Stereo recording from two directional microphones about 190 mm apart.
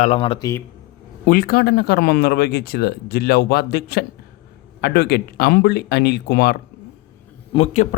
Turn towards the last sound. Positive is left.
turn(degrees=30)  # may be behind; listen again after turning